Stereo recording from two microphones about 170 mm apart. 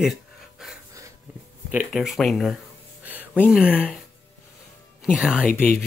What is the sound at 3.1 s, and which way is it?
Speech, 10° right (ahead or behind).